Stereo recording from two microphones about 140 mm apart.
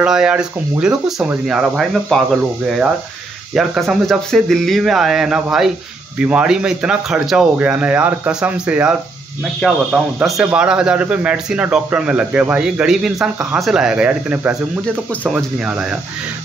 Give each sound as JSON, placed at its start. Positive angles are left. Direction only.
{"t": 0.0, "sound": "speech", "side_deg": -5}
{"t": 9.4, "sound": "speech", "side_deg": 0}